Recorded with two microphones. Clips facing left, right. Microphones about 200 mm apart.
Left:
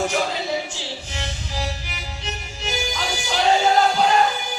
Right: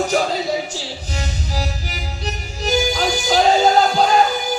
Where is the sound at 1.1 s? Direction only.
40° right (ahead or behind).